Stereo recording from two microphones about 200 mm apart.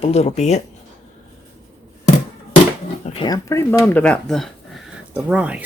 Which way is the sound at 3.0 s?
25° left (ahead or behind).